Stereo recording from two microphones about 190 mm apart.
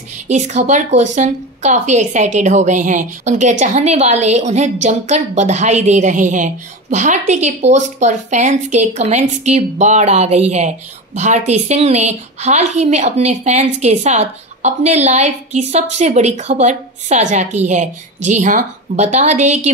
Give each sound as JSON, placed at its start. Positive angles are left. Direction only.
{"t": 0.3, "sound": "a woman's voice", "side_deg": -40}